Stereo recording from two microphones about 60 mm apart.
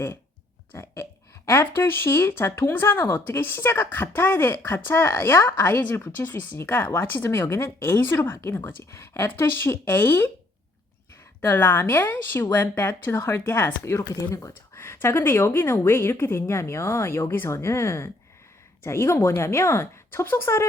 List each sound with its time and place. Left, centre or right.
0.7 s burping: left
1.5 s speech: left
11.4 s speech: left
13.8 s speech: left